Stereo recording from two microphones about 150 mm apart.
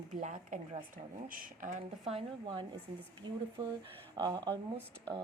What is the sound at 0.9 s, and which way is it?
Speech, 65° right (ahead or behind).